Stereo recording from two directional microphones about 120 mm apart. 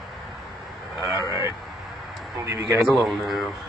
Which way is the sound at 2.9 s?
Centre (ahead or behind).